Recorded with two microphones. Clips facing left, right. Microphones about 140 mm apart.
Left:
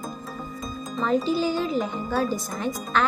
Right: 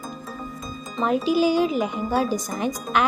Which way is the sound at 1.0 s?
15° right (ahead or behind).